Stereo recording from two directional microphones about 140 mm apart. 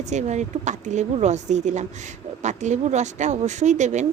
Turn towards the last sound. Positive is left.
turn(degrees=-60)  # may be behind; listen again after turning